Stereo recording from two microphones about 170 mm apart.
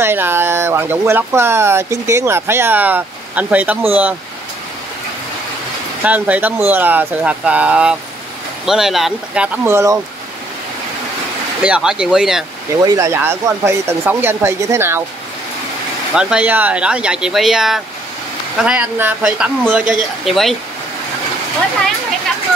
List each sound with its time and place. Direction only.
0.0 s speech: 15° right (ahead or behind)
6.0 s speech: 10° right (ahead or behind)
11.6 s speech: 5° right (ahead or behind)
12.8 s speech: 20° right (ahead or behind)
16.2 s speech: 5° right (ahead or behind)